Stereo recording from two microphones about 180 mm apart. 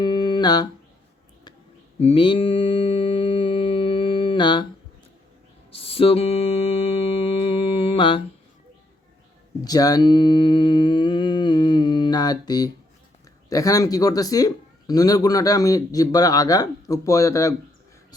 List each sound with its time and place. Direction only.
0.0 s a sound: 25° left (ahead or behind)
2.0 s mantra: 30° left (ahead or behind)
5.7 s music: 30° left (ahead or behind)
9.6 s humming: 20° left (ahead or behind)
13.5 s speech: 20° left (ahead or behind)